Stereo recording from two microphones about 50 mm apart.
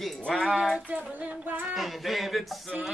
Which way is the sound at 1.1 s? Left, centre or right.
Right.